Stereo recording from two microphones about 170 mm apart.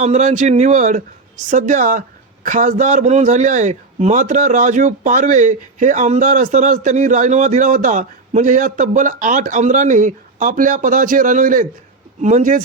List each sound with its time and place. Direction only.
0.0 s a man's voice: 45° right (ahead or behind)